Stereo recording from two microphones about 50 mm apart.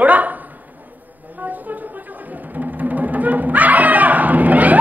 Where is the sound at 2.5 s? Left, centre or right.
Right.